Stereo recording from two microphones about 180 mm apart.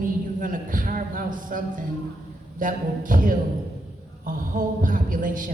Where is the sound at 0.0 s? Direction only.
50° right (ahead or behind).